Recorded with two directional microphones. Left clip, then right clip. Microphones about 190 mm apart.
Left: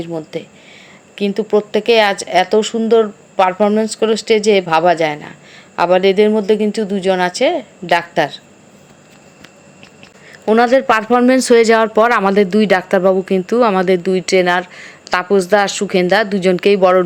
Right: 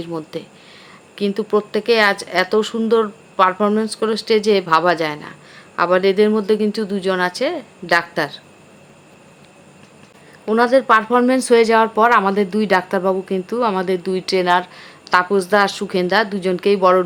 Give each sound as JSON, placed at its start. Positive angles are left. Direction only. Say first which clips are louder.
{"t": 0.0, "sound": "speech", "louder": "left 3 dB", "side_deg": 5}
{"t": 10.4, "sound": "speech", "louder": "left 3 dB", "side_deg": 15}